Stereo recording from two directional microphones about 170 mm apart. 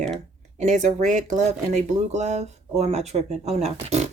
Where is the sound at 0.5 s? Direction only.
45° right (ahead or behind).